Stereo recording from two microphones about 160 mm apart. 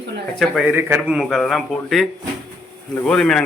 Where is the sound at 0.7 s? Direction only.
10° right (ahead or behind).